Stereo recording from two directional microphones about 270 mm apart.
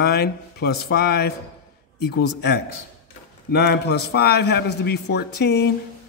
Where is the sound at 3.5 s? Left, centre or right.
Left.